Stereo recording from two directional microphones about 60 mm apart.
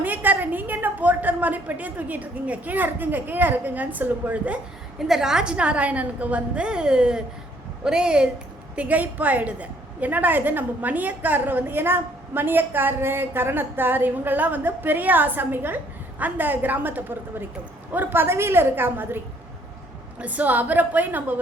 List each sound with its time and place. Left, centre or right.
0.0 s a woman's voice: right
4.9 s a woman's voice: centre; by 19.2 s right
20.1 s a woman's voice: right